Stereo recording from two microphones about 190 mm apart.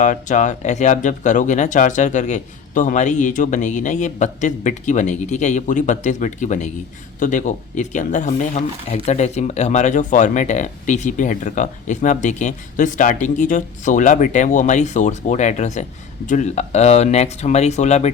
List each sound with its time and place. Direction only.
0.0 s speech: 40° left (ahead or behind)